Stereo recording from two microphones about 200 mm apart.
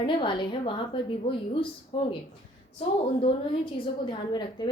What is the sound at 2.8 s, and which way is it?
A woman's voice, 30° left (ahead or behind).